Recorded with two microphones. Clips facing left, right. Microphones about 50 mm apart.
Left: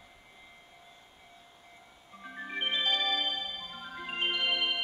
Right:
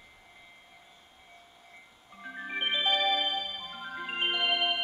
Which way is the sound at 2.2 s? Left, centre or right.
Centre.